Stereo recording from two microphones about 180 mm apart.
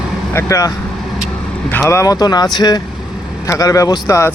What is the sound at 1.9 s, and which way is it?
Speech, 15° left (ahead or behind).